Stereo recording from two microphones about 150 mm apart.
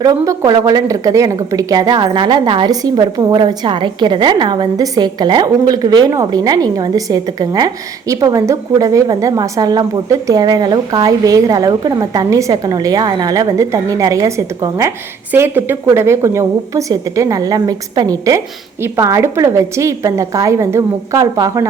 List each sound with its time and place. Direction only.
0.0 s a woman's voice: 25° right (ahead or behind)